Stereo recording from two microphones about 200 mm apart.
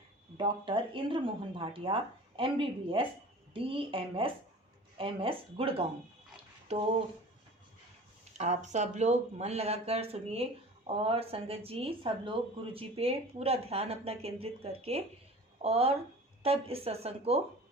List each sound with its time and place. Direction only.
0.3 s speech: 25° right (ahead or behind)
8.4 s speech: 35° right (ahead or behind)